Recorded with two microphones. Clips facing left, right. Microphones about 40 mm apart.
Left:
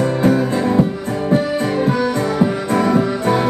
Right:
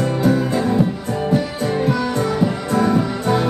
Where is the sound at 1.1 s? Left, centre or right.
Left.